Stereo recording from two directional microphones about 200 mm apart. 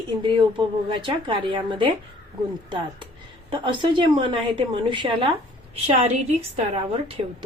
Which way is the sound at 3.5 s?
25° right (ahead or behind).